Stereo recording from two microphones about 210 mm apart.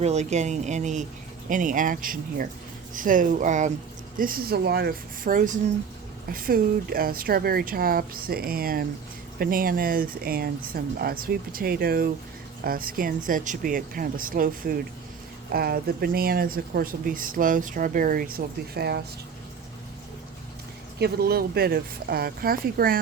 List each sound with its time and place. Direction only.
0.0 s speech: 30° right (ahead or behind); by 19.0 s 50° right (ahead or behind)
21.0 s speech: 50° right (ahead or behind)